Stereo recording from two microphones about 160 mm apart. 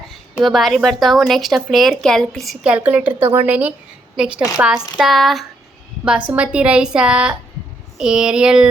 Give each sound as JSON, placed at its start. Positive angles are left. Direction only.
{"t": 0.1, "sound": "a woman's voice", "side_deg": 0}